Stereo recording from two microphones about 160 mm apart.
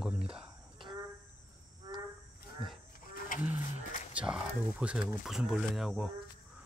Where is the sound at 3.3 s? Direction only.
60° left (ahead or behind).